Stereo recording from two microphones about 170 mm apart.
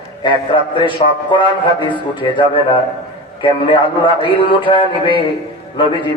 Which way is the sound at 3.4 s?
30° left (ahead or behind).